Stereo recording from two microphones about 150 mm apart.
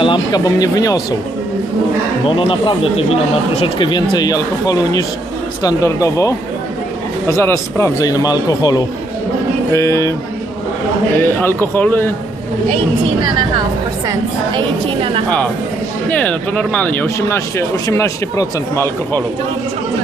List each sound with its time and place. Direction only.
0.0 s a man's voice: 30° left (ahead or behind)
2.2 s a man's voice: 35° left (ahead or behind)
11.2 s speech: 15° left (ahead or behind)
14.5 s a woman's voice: 35° right (ahead or behind)
16.0 s speech: 10° left (ahead or behind)